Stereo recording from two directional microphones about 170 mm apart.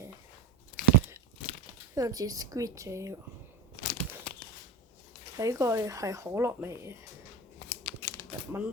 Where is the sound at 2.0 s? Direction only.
20° right (ahead or behind).